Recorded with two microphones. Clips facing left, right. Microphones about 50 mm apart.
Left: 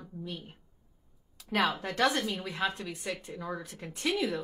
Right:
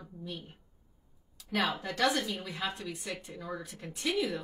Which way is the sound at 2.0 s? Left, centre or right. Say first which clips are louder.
Left 2 dB; left.